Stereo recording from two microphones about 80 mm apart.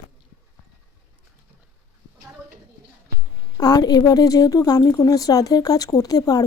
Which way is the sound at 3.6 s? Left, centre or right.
Left.